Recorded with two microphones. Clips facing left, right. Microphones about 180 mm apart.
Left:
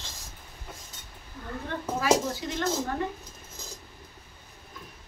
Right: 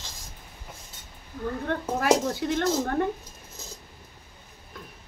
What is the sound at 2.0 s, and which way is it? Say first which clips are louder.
Speech: right 2 dB; 60° right (ahead or behind).